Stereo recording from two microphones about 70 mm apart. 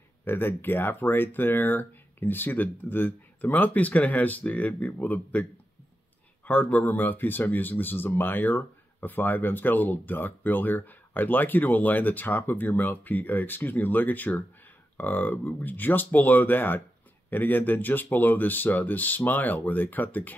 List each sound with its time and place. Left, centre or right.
0.2 s speech: left